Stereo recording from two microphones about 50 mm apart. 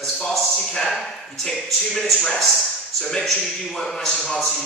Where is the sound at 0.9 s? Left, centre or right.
Centre.